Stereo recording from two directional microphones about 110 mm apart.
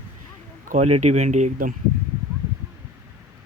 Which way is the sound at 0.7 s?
80° right.